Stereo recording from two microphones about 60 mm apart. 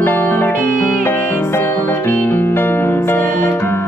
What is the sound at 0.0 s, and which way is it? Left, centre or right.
Music, left.